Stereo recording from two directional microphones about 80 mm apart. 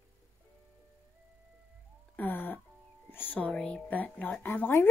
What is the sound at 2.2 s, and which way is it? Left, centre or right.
A woman's voice, left.